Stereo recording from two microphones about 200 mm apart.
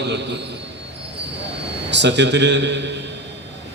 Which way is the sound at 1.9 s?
60° right (ahead or behind).